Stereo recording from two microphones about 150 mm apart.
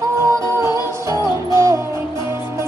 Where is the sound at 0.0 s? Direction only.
20° right (ahead or behind).